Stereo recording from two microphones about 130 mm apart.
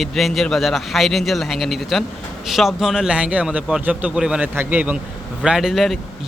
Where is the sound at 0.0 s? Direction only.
Centre (ahead or behind).